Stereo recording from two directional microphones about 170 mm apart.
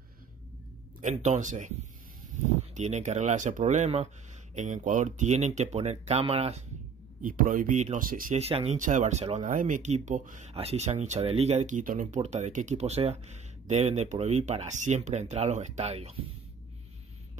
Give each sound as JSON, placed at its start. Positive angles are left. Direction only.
{"t": 1.0, "sound": "speech", "side_deg": -45}
{"t": 2.7, "sound": "speech", "side_deg": -40}
{"t": 7.2, "sound": "speech", "side_deg": -55}
{"t": 8.4, "sound": "speech", "side_deg": -35}
{"t": 10.5, "sound": "speech", "side_deg": -35}